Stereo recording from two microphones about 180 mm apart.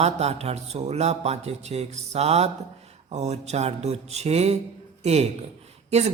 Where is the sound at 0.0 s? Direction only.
35° right (ahead or behind).